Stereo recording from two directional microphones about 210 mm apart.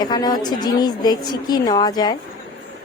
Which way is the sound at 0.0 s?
20° left (ahead or behind).